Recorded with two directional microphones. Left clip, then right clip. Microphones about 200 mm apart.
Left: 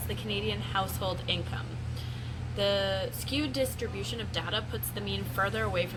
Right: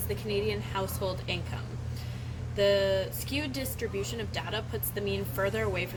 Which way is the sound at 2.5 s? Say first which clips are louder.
Right 3 dB; 60° right (ahead or behind).